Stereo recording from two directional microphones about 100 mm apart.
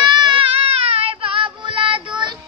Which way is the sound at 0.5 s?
85° right.